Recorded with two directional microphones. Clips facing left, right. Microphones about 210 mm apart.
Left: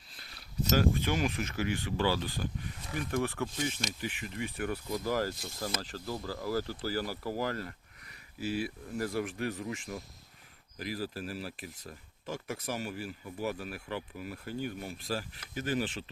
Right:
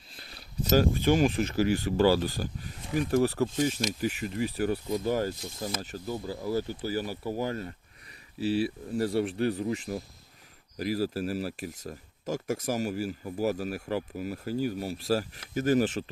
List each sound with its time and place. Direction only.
0.2 s speech: 30° right (ahead or behind)
4.9 s speech: 25° right (ahead or behind); by 16.0 s 45° right (ahead or behind)